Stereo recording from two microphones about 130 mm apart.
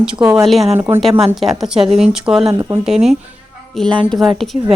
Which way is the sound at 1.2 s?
Centre (ahead or behind).